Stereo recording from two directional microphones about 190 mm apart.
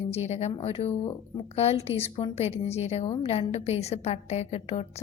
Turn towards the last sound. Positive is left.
turn(degrees=35)  # may be behind; listen again after turning